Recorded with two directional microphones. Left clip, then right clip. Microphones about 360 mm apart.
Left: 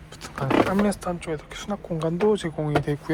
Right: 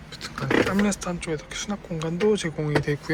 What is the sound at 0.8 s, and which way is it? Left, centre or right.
Speech, centre.